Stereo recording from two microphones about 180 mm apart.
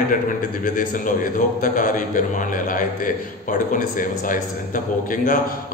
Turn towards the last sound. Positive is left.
turn(degrees=50)  # may be behind; listen again after turning